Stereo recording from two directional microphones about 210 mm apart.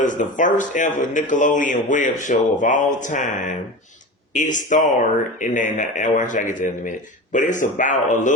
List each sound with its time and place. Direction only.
0.0 s a man's voice: 35° left (ahead or behind)